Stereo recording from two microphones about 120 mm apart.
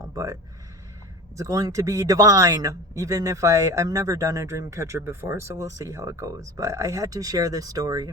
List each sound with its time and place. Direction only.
0.0 s speech: 30° right (ahead or behind)
1.4 s speech: 30° right (ahead or behind)